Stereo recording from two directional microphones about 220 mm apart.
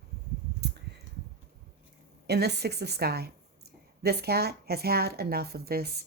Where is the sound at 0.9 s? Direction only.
50° right (ahead or behind).